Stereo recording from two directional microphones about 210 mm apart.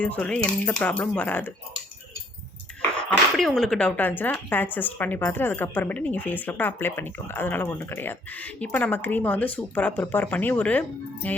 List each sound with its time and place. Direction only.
0.0 s speech: 5° left (ahead or behind)
2.9 s speech: 5° left (ahead or behind)